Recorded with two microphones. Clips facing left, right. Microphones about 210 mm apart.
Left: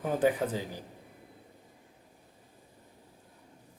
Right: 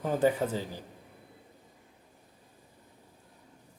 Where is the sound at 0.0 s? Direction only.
10° left (ahead or behind).